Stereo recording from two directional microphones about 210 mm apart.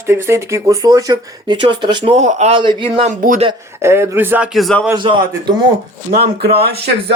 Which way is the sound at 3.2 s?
40° right (ahead or behind).